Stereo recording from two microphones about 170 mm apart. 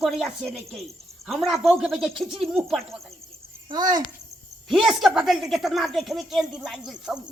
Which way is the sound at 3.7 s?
25° right (ahead or behind).